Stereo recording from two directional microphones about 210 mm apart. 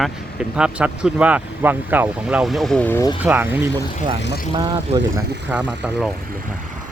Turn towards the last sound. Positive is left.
turn(degrees=-5)  # may be behind; listen again after turning